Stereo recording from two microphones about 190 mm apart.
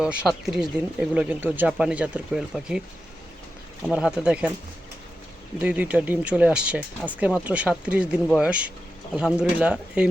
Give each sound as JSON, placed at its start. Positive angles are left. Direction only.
{"t": 0.0, "sound": "speech", "side_deg": -5}
{"t": 3.9, "sound": "speech", "side_deg": -5}
{"t": 5.6, "sound": "speech", "side_deg": -5}